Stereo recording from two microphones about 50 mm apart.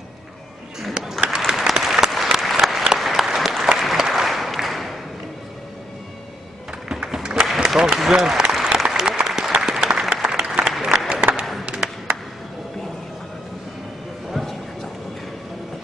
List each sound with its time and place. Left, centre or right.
1.2 s applause: centre
1.5 s applause: centre
6.9 s a sound: centre
7.4 s applause: centre
11.6 s music: centre
14.3 s a sound: centre